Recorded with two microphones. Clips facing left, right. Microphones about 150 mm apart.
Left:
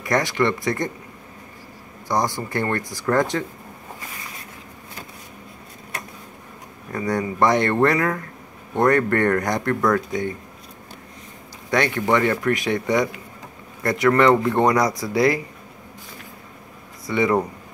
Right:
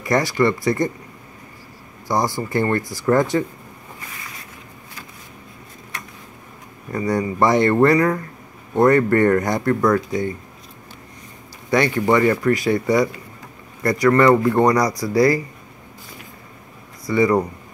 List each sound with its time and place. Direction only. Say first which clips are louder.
0.1 s speech: right 3 dB; 5° right (ahead or behind)
2.5 s speech: right 5 dB; 10° right (ahead or behind)
2.8 s speech: right 2 dB; 20° left (ahead or behind)
3.1 s speech: right 3 dB; 10° right (ahead or behind)
6.9 s speech: right 3 dB; centre (ahead or behind)
11.7 s speech: right 3 dB; 10° right (ahead or behind)
17.0 s speech: right 3 dB; centre (ahead or behind)